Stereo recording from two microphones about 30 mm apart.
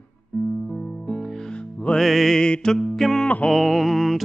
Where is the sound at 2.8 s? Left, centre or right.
Centre.